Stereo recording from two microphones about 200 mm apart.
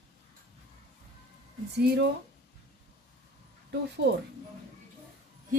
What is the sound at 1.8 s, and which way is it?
Speech, 55° right (ahead or behind).